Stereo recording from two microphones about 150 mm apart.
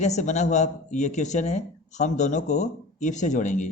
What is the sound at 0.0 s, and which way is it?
Speech, 50° left (ahead or behind).